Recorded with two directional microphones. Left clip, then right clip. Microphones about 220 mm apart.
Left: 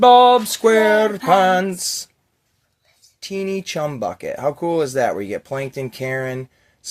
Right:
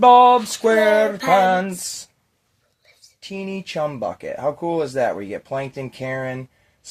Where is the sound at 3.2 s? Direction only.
40° left (ahead or behind).